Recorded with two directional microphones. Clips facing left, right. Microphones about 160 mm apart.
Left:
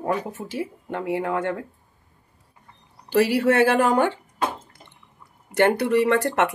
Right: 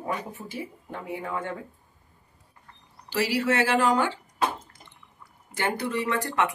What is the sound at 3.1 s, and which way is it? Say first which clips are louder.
Speech: left 7 dB; 55° left (ahead or behind).